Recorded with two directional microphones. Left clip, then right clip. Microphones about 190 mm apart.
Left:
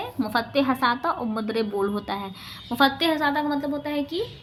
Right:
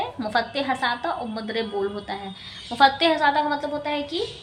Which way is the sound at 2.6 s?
30° left (ahead or behind).